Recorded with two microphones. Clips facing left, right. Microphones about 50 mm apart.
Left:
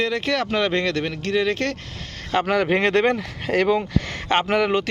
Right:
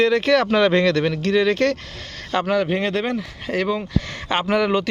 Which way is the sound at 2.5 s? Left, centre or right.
Left.